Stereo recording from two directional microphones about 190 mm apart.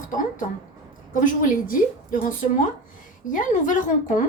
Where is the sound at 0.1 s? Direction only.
45° left (ahead or behind).